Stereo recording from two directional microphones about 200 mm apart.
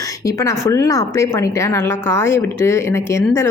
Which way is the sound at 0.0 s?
15° left (ahead or behind).